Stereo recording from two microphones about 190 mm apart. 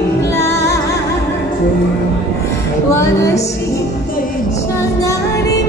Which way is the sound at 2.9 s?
15° left (ahead or behind).